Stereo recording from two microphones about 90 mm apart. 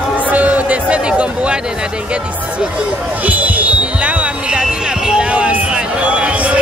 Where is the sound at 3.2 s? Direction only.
15° right (ahead or behind).